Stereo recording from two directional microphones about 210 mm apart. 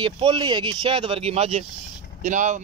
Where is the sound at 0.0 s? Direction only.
20° right (ahead or behind).